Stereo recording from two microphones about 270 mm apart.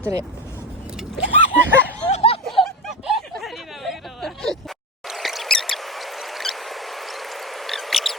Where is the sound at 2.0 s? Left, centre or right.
Left.